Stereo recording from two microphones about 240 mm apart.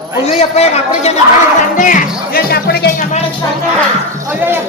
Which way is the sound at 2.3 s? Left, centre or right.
Left.